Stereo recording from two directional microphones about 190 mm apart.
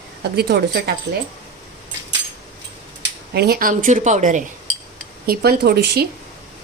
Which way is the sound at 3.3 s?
55° right (ahead or behind).